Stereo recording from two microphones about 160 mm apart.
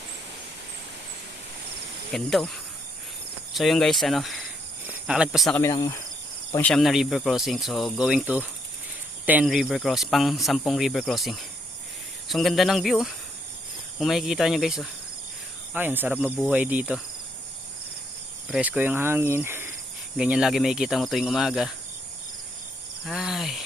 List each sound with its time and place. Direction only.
2.1 s speech: centre (ahead or behind)
5.5 s cricket: 20° left (ahead or behind)
6.6 s speech: 5° left (ahead or behind)
15.7 s cricket: 10° right (ahead or behind)
18.5 s cricket: 5° right (ahead or behind)
20.1 s speech: 5° right (ahead or behind)
23.0 s speech: centre (ahead or behind)